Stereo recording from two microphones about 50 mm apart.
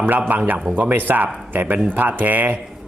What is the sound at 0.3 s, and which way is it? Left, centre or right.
A man's voice, right.